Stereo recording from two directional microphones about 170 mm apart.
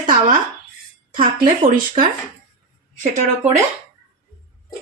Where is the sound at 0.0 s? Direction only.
50° right (ahead or behind).